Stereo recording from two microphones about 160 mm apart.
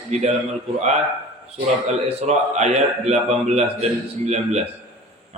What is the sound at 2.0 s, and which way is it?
A man's voice, 45° right (ahead or behind).